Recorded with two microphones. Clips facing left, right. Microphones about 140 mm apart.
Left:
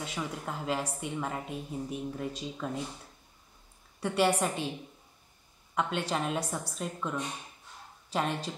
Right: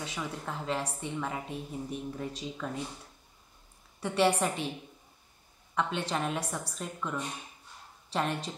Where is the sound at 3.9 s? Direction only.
Centre (ahead or behind).